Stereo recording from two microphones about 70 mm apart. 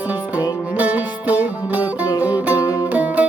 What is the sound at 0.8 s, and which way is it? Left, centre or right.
Music, right.